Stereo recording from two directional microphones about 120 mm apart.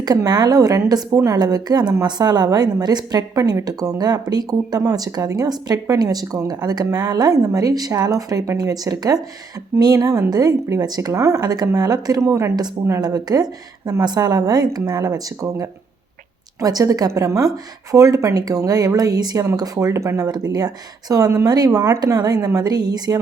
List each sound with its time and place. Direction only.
0.0 s a woman's voice: 35° right (ahead or behind)
12.5 s a woman's voice: 35° right (ahead or behind)